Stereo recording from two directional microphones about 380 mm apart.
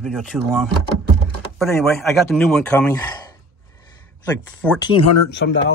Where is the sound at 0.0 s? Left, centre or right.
Centre.